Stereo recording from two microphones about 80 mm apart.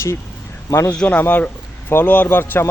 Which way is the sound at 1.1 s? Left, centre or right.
Left.